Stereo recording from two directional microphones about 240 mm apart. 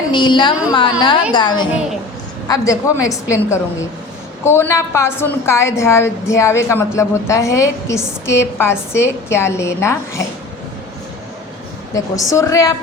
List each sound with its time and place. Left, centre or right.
0.1 s a woman's voice: centre
12.3 s a woman's voice: centre